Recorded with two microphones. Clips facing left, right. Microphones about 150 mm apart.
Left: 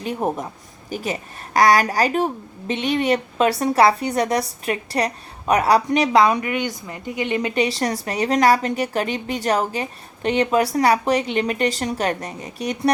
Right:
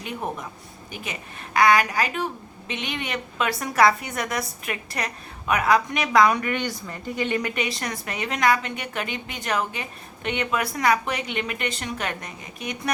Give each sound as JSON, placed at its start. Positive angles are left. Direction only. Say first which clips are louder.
{"t": 0.0, "sound": "a woman's voice", "louder": "left 7 dB", "side_deg": 40}
{"t": 6.4, "sound": "a woman's voice", "louder": "left 3 dB", "side_deg": 10}